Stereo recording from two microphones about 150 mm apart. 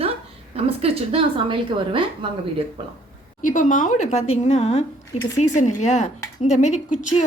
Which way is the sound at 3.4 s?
60° left (ahead or behind).